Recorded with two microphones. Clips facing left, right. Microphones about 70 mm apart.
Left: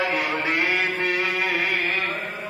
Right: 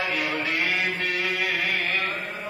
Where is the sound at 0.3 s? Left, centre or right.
Left.